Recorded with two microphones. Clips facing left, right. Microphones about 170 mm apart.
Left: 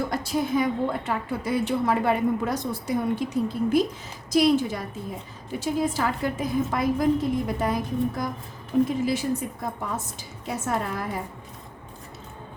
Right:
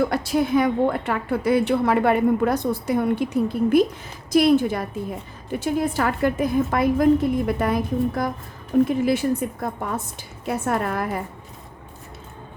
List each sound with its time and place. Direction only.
0.0 s a woman's voice: 70° right (ahead or behind)